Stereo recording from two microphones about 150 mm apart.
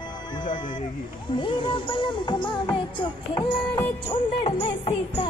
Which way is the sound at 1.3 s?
35° left (ahead or behind).